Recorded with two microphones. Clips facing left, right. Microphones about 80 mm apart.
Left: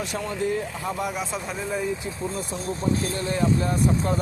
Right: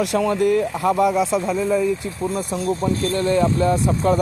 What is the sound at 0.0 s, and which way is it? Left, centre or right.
Speech, right.